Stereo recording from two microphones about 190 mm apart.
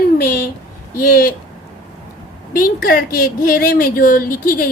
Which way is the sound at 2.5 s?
50° left (ahead or behind).